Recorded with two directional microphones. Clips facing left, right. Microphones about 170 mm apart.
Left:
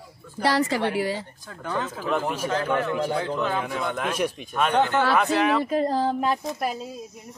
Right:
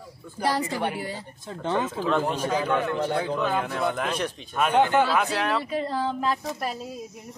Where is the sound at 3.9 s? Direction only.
10° left (ahead or behind).